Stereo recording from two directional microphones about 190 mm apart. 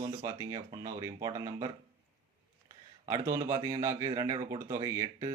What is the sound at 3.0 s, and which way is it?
Speech, 15° right (ahead or behind).